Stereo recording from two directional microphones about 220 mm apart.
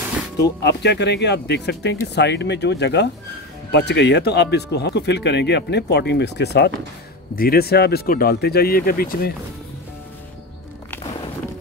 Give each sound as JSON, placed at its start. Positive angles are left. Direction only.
{"t": 0.4, "sound": "speech", "side_deg": 50}